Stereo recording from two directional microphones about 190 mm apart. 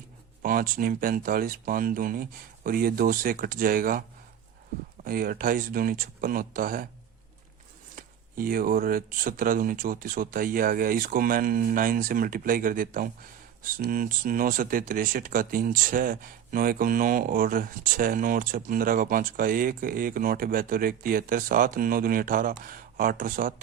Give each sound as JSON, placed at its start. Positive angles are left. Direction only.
{"t": 0.4, "sound": "speech", "side_deg": -50}
{"t": 5.0, "sound": "speech", "side_deg": -50}
{"t": 7.9, "sound": "speech", "side_deg": -50}